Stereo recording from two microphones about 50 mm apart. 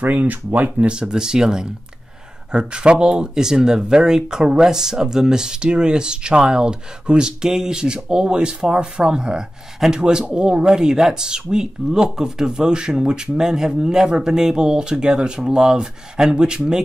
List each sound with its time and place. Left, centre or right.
0.0 s speech: right
0.8 s speech: centre